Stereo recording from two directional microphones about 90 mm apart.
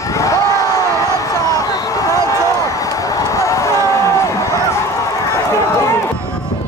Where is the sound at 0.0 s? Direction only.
35° left (ahead or behind).